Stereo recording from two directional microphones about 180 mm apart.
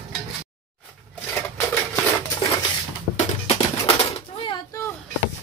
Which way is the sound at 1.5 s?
15° left (ahead or behind).